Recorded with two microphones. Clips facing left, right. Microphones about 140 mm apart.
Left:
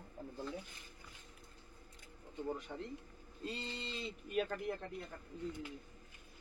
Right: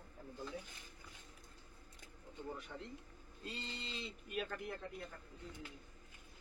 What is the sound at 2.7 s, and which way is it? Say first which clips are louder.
Speech: left 4 dB; 30° left (ahead or behind).